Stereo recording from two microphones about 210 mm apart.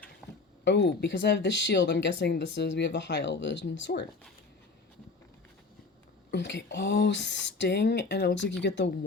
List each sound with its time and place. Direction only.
0.6 s speech: 55° left (ahead or behind)
6.3 s speech: 55° left (ahead or behind)